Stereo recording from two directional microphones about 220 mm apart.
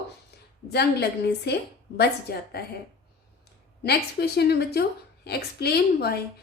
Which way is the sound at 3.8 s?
45° left (ahead or behind).